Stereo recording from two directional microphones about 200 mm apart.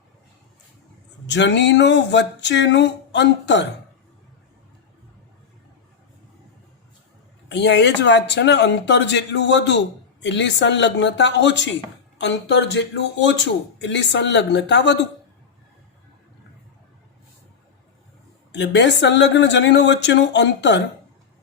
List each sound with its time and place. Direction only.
1.3 s speech: 60° left (ahead or behind)
7.4 s speech: 60° left (ahead or behind)
18.5 s speech: 60° left (ahead or behind)